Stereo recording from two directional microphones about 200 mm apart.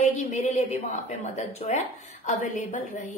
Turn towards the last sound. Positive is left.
turn(degrees=40)  # may be behind; listen again after turning